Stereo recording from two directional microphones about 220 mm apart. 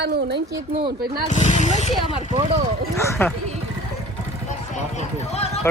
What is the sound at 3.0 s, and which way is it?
Speech, 10° left (ahead or behind).